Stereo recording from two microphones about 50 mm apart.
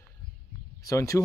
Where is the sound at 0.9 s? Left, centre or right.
Left.